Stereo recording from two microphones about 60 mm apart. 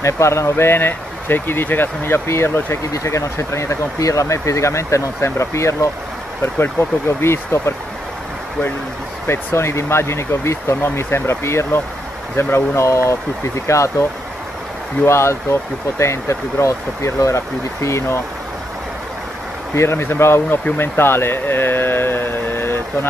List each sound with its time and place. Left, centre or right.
0.0 s speech: left
2.9 s speech: left
6.4 s speech: left
9.3 s speech: left
15.0 s speech: left
19.7 s speech: left
20.7 s carnatic music: left